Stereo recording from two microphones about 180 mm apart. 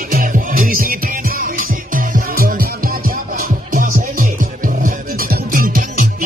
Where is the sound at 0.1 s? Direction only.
50° right (ahead or behind).